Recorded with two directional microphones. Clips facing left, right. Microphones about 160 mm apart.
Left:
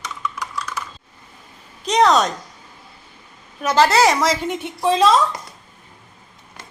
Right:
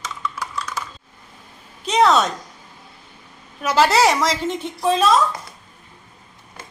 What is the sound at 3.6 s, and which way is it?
Speech, 5° right (ahead or behind).